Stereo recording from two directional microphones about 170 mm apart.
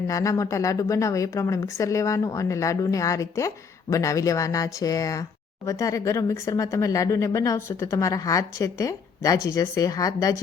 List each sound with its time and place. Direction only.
0.1 s a woman's voice: 20° left (ahead or behind)